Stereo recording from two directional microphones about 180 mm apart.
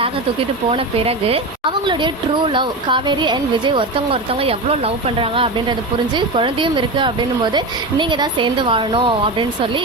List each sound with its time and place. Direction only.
0.7 s a woman's voice: 30° right (ahead or behind)